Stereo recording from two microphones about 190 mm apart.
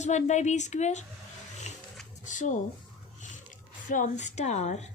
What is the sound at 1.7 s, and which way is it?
Roaring cats, 35° left (ahead or behind).